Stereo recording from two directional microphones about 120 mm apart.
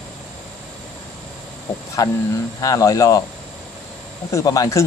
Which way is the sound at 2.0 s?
30° left (ahead or behind).